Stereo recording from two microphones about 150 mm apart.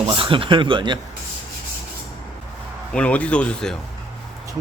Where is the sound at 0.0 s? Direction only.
35° right (ahead or behind).